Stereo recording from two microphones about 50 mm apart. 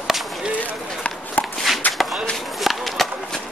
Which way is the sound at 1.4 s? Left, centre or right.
Left.